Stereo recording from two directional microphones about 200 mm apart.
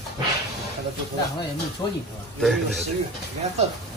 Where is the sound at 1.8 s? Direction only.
15° left (ahead or behind).